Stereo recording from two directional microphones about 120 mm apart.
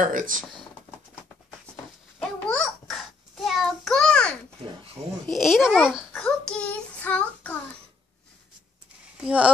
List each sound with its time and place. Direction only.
0.0 s speech: 90° right
2.1 s a sound: 5° left (ahead or behind)
5.3 s a child's voice: centre (ahead or behind)
6.1 s child singing: 5° left (ahead or behind)
9.2 s speech: 10° right (ahead or behind)